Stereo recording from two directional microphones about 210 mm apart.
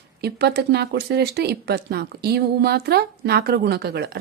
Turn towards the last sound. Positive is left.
turn(degrees=-50)  # may be behind; listen again after turning